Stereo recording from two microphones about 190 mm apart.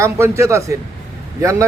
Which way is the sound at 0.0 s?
15° right (ahead or behind).